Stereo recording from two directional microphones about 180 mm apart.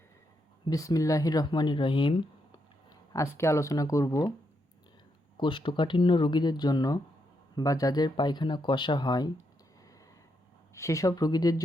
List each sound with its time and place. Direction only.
0.6 s speech: 20° left (ahead or behind)
3.1 s speech: 15° left (ahead or behind)
5.4 s speech: 25° left (ahead or behind)
10.8 s speech: 15° left (ahead or behind)